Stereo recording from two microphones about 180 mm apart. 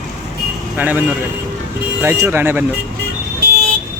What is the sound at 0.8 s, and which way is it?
Speech, 10° right (ahead or behind).